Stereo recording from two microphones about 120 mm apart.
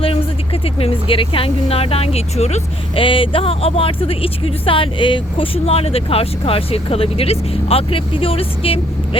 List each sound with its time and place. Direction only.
0.0 s speech: 55° left (ahead or behind)